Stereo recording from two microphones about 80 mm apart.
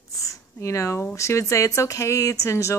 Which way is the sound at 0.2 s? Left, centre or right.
Left.